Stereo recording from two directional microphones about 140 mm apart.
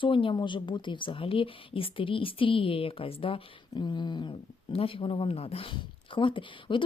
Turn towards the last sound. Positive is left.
turn(degrees=35)  # may be behind; listen again after turning